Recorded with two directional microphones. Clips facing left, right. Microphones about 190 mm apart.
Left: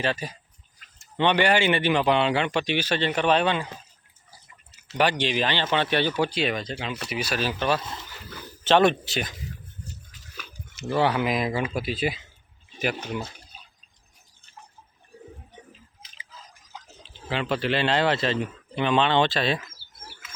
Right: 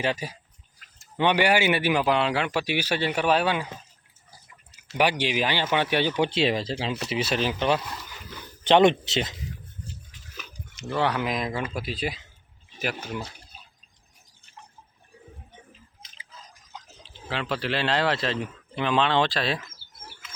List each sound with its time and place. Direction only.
0.0 s speech: 10° right (ahead or behind)
4.8 s speech: 10° right (ahead or behind)
10.8 s speech: 5° left (ahead or behind)
17.2 s speech: centre (ahead or behind)